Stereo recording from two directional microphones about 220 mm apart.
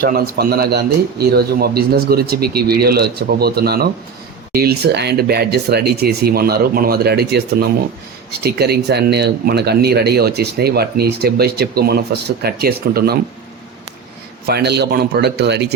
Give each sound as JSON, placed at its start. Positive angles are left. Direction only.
{"t": 0.0, "sound": "speech", "side_deg": -45}
{"t": 14.4, "sound": "speech", "side_deg": -50}